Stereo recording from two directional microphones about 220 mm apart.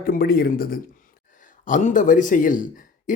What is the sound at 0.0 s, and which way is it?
A man's voice, 40° left (ahead or behind).